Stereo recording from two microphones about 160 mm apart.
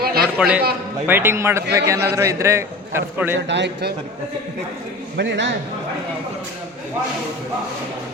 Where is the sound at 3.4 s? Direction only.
90° right.